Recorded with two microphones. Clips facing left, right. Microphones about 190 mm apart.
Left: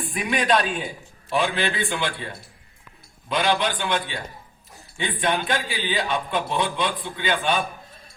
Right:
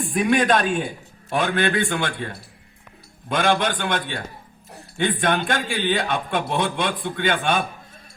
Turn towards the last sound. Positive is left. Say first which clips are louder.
# right 2 dB
turn(degrees=-50)  # may be behind; listen again after turning